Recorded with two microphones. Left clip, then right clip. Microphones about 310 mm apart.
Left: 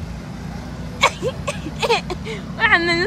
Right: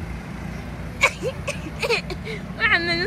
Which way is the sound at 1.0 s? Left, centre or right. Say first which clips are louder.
Left 3 dB; left.